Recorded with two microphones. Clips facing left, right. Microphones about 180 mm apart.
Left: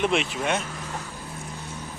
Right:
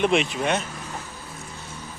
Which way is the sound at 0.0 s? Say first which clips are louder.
Right 3 dB; centre (ahead or behind).